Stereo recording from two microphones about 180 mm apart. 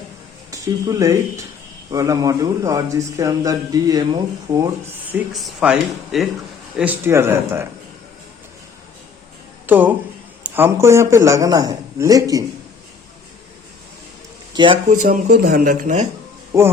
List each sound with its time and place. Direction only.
0.5 s a man's voice: 20° right (ahead or behind)
5.1 s a man's voice: 5° right (ahead or behind)
9.6 s a man's voice: 10° right (ahead or behind)
14.5 s speech: 25° right (ahead or behind)
14.8 s speech: 45° right (ahead or behind)